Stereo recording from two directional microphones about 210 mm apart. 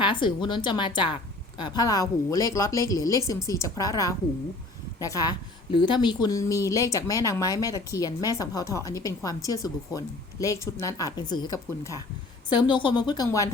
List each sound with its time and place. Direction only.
0.0 s a woman's voice: 25° left (ahead or behind)